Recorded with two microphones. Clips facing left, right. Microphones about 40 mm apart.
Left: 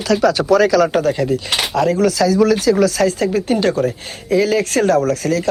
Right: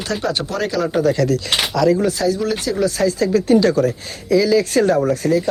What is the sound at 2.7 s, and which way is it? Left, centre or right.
Speech, left.